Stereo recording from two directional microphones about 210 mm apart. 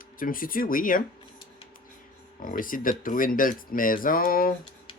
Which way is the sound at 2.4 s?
40° left (ahead or behind).